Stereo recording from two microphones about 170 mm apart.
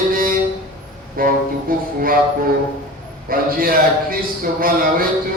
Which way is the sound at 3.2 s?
60° right (ahead or behind).